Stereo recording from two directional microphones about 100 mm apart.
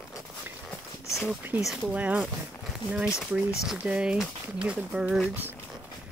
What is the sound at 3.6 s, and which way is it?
Speech, 10° right (ahead or behind).